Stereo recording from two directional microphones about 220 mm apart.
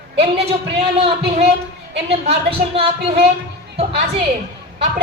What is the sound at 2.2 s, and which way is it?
Speech, 25° right (ahead or behind).